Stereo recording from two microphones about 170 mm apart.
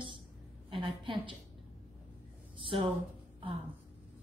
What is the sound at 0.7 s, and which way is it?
Speech, 30° right (ahead or behind).